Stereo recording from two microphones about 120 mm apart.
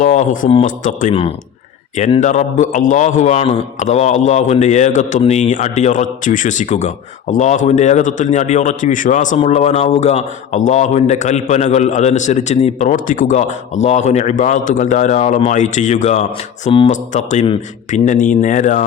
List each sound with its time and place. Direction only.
0.0 s speech: 85° left
2.2 s a man's voice: 80° left
5.2 s speech: 75° left (ahead or behind)
9.4 s a man's voice: 65° left (ahead or behind); by 18.9 s 90° left